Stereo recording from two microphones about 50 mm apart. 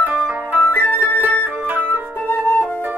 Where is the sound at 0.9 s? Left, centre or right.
Right.